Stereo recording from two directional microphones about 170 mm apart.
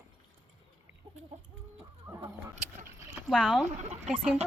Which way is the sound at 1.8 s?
10° right (ahead or behind).